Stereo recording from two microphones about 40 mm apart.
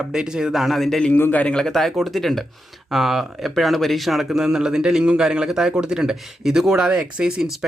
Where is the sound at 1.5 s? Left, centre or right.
Centre.